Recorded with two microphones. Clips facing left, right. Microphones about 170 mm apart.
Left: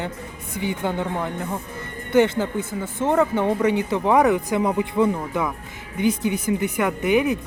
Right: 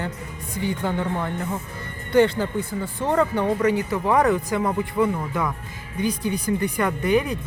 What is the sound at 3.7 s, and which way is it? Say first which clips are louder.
Speech: left 2 dB; 25° left (ahead or behind).